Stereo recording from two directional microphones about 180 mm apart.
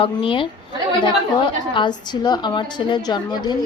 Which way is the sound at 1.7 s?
25° left (ahead or behind).